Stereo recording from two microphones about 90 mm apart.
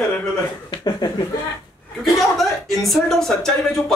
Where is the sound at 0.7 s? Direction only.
50° left (ahead or behind).